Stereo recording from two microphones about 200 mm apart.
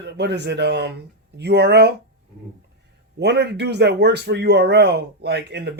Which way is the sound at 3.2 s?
55° right (ahead or behind).